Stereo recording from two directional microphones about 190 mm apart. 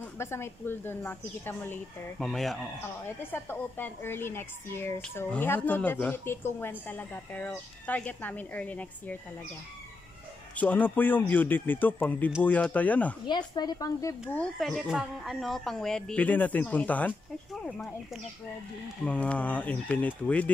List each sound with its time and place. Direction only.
0.2 s a woman's voice: 15° left (ahead or behind)
3.2 s a woman's voice: 10° left (ahead or behind)
10.5 s a woman's voice: 10° left (ahead or behind)
13.3 s speech: 20° left (ahead or behind)
14.3 s a woman's voice: 5° left (ahead or behind)